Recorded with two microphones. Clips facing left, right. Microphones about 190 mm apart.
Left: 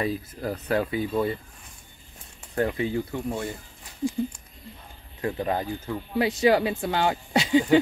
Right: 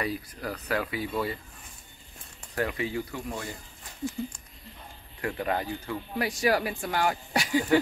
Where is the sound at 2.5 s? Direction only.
30° left (ahead or behind).